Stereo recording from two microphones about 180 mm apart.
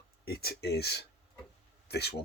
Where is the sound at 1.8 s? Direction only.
65° left (ahead or behind).